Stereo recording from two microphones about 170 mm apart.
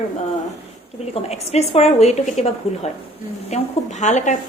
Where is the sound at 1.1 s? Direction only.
40° left (ahead or behind).